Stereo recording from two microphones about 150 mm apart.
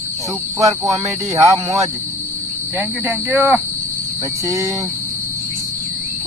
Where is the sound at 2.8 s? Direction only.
10° right (ahead or behind).